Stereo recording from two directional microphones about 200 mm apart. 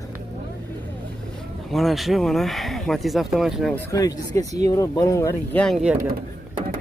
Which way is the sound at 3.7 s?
15° left (ahead or behind).